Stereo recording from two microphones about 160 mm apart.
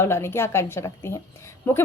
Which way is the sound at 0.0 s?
15° left (ahead or behind).